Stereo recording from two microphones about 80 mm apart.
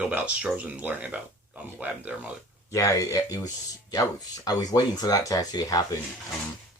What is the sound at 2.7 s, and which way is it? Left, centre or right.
Speech, left.